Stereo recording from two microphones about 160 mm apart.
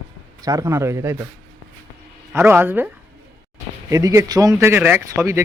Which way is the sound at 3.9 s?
20° right (ahead or behind).